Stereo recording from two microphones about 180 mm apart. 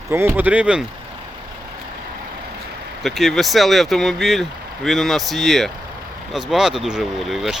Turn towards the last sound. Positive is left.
turn(degrees=0)  # may be behind; listen again after turning